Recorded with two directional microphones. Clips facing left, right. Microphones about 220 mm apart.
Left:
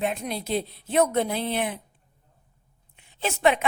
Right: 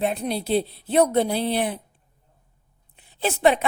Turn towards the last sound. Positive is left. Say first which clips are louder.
# right 3 dB
turn(degrees=-35)  # may be behind; listen again after turning